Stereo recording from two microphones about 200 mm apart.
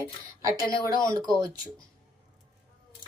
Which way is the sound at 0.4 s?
20° right (ahead or behind).